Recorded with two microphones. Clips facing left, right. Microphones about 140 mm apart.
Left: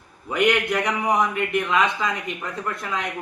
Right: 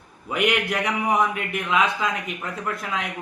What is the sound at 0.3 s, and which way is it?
A man's voice, 5° right (ahead or behind).